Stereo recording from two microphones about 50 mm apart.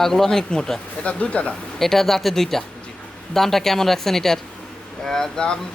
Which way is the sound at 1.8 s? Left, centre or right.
Centre.